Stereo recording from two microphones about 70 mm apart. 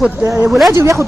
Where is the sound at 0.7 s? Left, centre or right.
Right.